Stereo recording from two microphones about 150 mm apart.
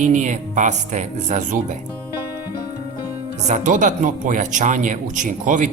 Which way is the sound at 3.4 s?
55° right (ahead or behind).